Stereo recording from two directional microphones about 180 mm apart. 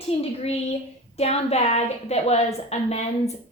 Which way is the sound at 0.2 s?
35° left (ahead or behind).